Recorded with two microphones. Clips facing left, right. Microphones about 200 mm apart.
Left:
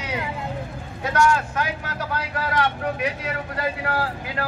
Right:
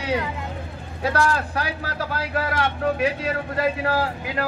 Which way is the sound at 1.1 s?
35° right (ahead or behind).